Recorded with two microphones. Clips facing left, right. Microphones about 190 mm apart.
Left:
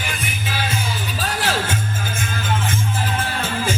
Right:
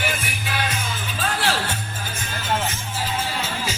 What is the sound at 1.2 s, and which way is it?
Music, 45° left (ahead or behind).